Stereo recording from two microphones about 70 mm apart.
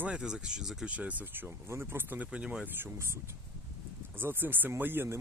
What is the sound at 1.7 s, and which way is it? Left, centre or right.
Speech, right.